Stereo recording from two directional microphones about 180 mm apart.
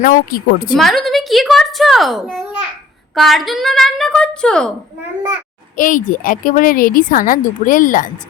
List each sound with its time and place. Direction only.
0.0 s a woman's voice: 50° left (ahead or behind)
0.8 s a woman's voice: centre (ahead or behind)
5.7 s a woman's voice: 45° left (ahead or behind)